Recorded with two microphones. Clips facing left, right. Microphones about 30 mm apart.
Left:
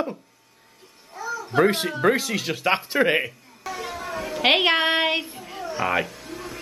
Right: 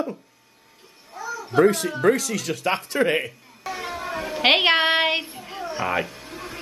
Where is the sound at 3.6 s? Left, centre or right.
Centre.